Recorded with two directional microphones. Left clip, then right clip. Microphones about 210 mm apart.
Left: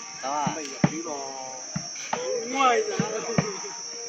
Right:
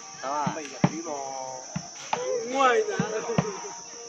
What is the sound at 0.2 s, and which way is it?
Music, 40° left (ahead or behind).